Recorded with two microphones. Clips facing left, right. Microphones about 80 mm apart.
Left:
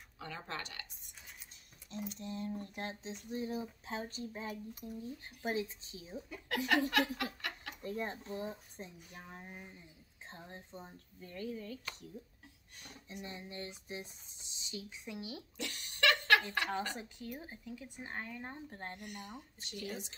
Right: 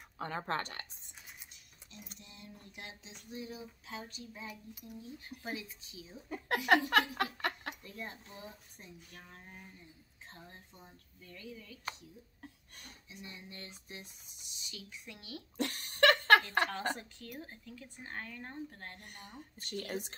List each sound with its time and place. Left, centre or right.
0.2 s a woman's voice: right
2.1 s a sound: left
6.2 s a woman's voice: right
7.8 s a sound: left
9.1 s speech: centre
10.3 s a sound: left
13.2 s speech: left
15.5 s laughter: right
16.9 s speech: centre
18.9 s a woman's voice: right
19.3 s speech: right